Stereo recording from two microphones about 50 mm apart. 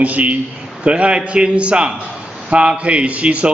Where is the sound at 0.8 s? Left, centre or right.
Right.